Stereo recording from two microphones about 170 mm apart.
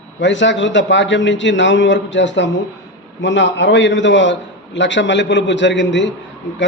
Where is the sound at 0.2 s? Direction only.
90° left.